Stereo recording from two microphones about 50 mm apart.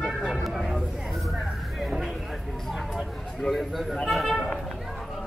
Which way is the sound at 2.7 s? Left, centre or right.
Centre.